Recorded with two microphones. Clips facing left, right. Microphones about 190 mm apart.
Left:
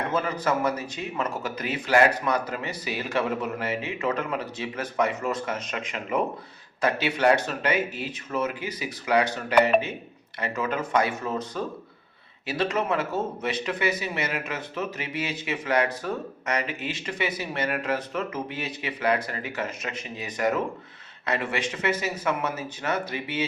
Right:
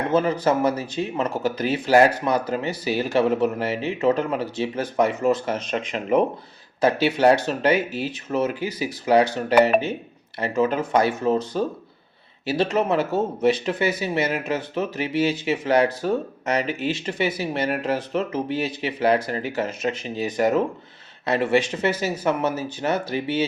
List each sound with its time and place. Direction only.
0.1 s speech: 30° right (ahead or behind)